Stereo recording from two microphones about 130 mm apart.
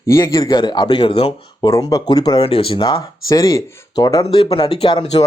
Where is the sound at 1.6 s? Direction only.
30° left (ahead or behind).